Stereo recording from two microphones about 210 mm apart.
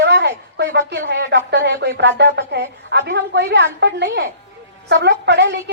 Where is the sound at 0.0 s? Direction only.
55° right (ahead or behind).